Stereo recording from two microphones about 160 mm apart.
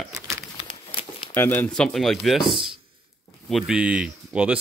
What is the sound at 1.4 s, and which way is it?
Speech, 15° left (ahead or behind).